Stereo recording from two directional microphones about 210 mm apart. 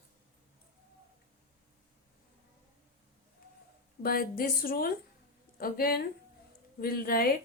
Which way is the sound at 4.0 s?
45° left (ahead or behind).